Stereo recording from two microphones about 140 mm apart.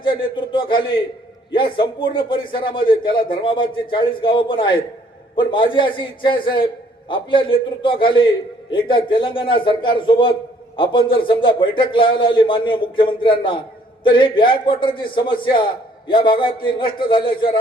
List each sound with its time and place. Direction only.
0.3 s a man's voice: 35° left (ahead or behind)